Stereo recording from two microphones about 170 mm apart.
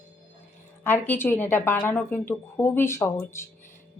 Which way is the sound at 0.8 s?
10° left (ahead or behind).